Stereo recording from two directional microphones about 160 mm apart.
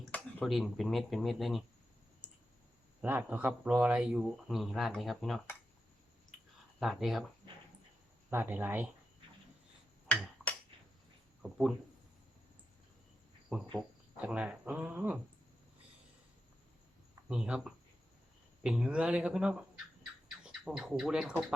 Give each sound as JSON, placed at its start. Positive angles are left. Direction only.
{"t": 0.1, "sound": "speech", "side_deg": 5}
{"t": 3.0, "sound": "speech", "side_deg": -10}
{"t": 6.7, "sound": "speech", "side_deg": 0}
{"t": 8.3, "sound": "speech", "side_deg": -10}
{"t": 11.4, "sound": "speech", "side_deg": 0}
{"t": 13.7, "sound": "speech", "side_deg": -5}
{"t": 17.2, "sound": "speech", "side_deg": -5}